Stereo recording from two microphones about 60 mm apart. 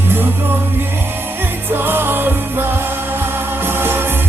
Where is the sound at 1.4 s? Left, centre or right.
Right.